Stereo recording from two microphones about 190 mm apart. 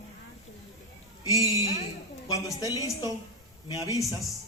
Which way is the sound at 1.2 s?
20° left (ahead or behind).